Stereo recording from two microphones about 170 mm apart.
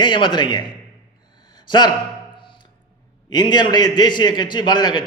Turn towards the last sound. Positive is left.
turn(degrees=25)  # may be behind; listen again after turning